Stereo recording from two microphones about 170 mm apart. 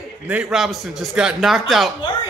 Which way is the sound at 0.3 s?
5° right (ahead or behind).